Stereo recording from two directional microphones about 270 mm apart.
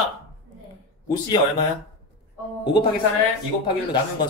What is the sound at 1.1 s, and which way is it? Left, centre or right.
Speech, centre.